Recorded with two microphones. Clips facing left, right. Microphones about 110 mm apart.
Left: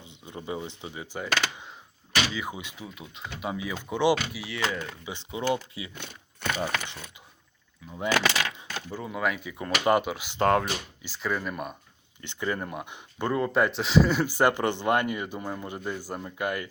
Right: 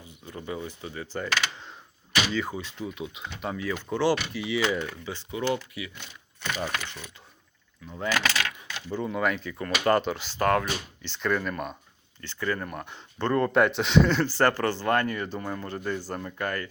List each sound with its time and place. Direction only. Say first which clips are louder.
0.0 s speech: even; 20° left (ahead or behind)
2.3 s speech: right 4 dB; 10° left (ahead or behind)
2.8 s speech: right 6 dB; centre (ahead or behind)
3.5 s speech: right 3 dB; 10° left (ahead or behind)
4.4 s speech: right 8 dB; centre (ahead or behind)
4.6 s speech: right 1 dB; 15° right (ahead or behind)
5.0 s speech: left 2 dB; 20° left (ahead or behind)
8.0 s coin: left 2 dB; 25° left (ahead or behind)
8.9 s speech: right 3 dB; 5° left (ahead or behind)
10.4 s speech: left 1 dB; 25° left (ahead or behind)
11.0 s speech: right 4 dB; 5° left (ahead or behind)
12.2 s speech: even; 20° left (ahead or behind)